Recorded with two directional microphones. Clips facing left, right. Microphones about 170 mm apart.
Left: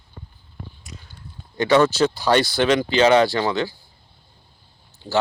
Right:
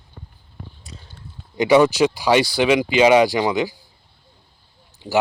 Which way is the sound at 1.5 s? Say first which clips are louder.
Right 2 dB; 15° right (ahead or behind).